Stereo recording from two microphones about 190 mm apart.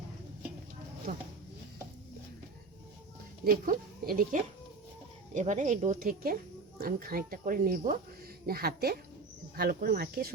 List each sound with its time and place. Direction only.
3.4 s speech: 50° right (ahead or behind)